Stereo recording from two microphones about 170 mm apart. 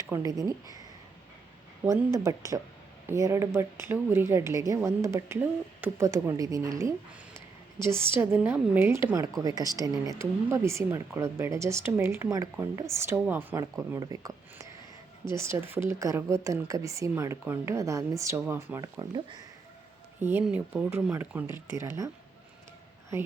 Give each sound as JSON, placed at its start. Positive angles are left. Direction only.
{"t": 0.0, "sound": "speech", "side_deg": -20}
{"t": 20.4, "sound": "speech", "side_deg": -5}